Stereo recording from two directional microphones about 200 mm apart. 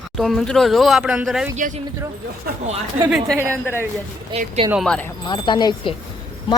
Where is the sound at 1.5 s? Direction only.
35° right (ahead or behind).